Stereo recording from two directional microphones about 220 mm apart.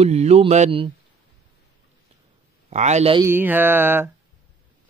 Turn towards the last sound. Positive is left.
turn(degrees=-10)  # may be behind; listen again after turning